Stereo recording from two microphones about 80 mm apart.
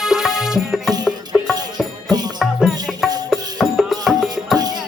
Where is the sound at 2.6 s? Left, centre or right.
Centre.